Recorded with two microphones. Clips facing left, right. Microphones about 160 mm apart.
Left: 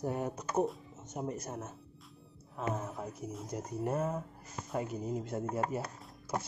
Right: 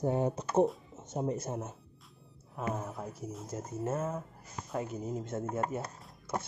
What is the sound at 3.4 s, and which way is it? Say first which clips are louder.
Speech: left 1 dB; 25° right (ahead or behind).